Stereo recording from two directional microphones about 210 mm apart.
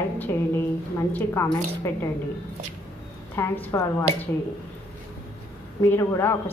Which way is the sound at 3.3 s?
10° left (ahead or behind).